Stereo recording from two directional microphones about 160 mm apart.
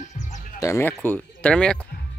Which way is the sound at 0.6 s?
15° left (ahead or behind).